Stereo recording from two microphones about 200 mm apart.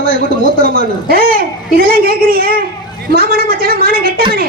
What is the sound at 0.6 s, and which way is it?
A man's voice, 50° right (ahead or behind).